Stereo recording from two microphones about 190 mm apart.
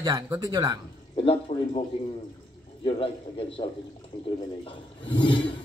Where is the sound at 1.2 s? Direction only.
30° left (ahead or behind).